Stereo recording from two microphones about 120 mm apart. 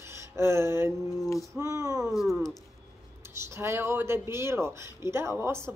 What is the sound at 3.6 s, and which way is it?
Speech, 20° right (ahead or behind).